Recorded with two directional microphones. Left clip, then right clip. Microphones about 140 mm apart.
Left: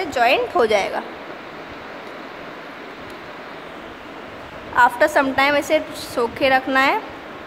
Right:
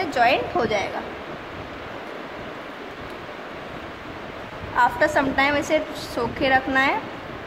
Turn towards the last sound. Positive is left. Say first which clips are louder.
# left 3 dB
turn(degrees=30)  # may be behind; listen again after turning